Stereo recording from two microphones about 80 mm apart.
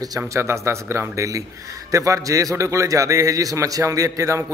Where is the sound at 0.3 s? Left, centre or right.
Right.